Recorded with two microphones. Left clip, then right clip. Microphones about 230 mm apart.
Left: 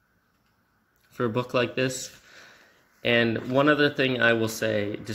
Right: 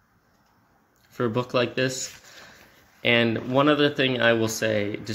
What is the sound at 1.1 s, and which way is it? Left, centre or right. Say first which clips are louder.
Speech: right 1 dB; centre.